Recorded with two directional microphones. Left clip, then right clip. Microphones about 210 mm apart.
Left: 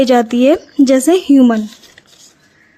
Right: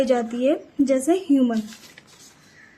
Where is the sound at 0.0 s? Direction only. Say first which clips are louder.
Left 10 dB; 40° left (ahead or behind).